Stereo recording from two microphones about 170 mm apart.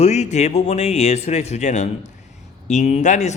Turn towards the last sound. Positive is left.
turn(degrees=45)  # may be behind; listen again after turning